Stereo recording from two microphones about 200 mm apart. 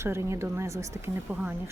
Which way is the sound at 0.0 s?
15° right (ahead or behind).